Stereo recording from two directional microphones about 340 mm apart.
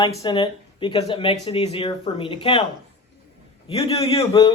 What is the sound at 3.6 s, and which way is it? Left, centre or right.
Speech, centre.